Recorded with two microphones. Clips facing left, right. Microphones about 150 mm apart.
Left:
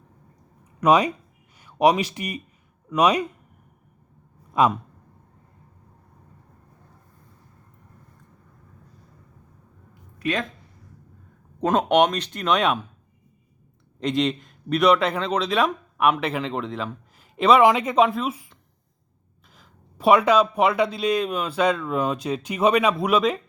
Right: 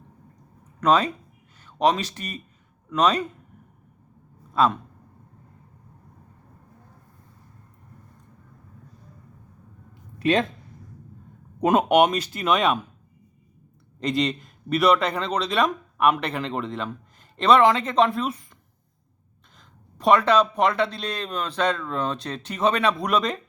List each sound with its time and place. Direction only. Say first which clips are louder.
0.8 s speech: left 2 dB; 10° left (ahead or behind)
4.5 s speech: left 1 dB; 15° left (ahead or behind)
10.2 s speech: right 5 dB; 25° right (ahead or behind)
11.6 s speech: right 1 dB; 10° right (ahead or behind)
14.0 s a man's voice: left 1 dB; centre (ahead or behind)
19.5 s speech: left 2 dB; 5° left (ahead or behind)